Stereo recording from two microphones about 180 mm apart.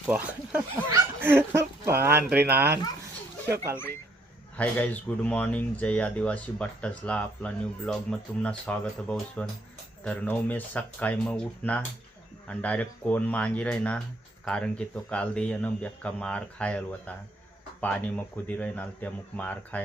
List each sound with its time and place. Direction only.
0.9 s speech: 15° right (ahead or behind)
4.5 s speech: 10° left (ahead or behind)